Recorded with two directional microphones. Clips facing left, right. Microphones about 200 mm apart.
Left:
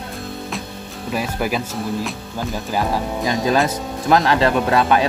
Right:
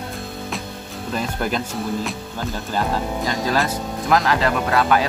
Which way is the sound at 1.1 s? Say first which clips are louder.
Left 2 dB; 5° left (ahead or behind).